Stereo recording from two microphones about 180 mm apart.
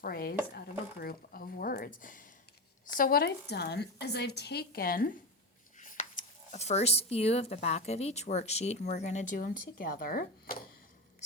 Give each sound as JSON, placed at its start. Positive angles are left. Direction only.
{"t": 0.0, "sound": "a woman's voice", "side_deg": 55}